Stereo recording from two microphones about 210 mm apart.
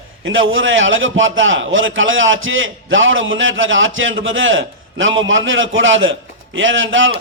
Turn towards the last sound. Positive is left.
turn(degrees=-65)  # may be behind; listen again after turning